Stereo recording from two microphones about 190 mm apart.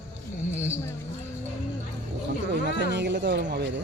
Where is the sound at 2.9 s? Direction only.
65° right (ahead or behind).